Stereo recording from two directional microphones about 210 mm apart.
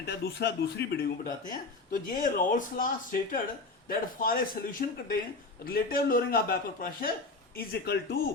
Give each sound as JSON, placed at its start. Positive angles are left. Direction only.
{"t": 0.0, "sound": "a man's voice", "side_deg": 50}